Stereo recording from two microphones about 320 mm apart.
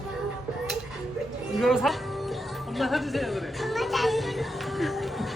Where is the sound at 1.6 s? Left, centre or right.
Centre.